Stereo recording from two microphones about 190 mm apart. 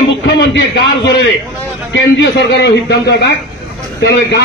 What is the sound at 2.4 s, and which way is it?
A man's voice, 65° left (ahead or behind).